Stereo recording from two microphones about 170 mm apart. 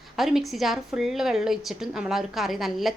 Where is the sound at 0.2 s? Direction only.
Centre (ahead or behind).